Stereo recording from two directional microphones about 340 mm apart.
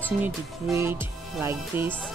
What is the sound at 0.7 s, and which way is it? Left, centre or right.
Music, centre.